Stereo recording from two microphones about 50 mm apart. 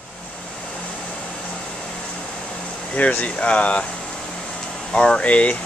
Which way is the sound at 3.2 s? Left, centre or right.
Left.